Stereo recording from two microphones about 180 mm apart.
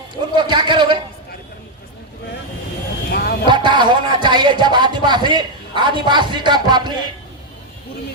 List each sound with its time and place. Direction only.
0.3 s a sound: 25° right (ahead or behind)
3.1 s vehicle: 60° left (ahead or behind)
3.4 s speech: 25° right (ahead or behind)